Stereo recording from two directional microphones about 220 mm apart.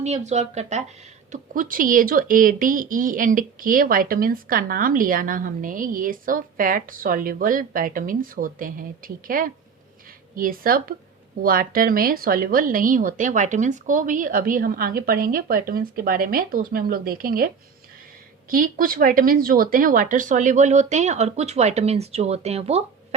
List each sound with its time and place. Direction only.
0.0 s speech: 30° right (ahead or behind)